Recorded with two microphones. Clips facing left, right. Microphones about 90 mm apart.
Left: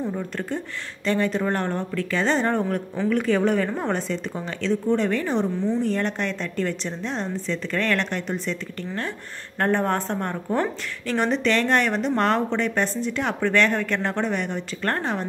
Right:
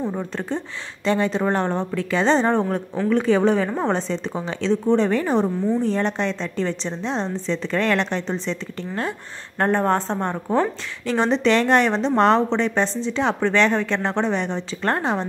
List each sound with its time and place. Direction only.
0.0 s a sound: 30° right (ahead or behind)
1.0 s a woman's voice: 25° right (ahead or behind)
9.6 s a woman's voice: 15° right (ahead or behind)
11.1 s a woman's voice: 30° right (ahead or behind)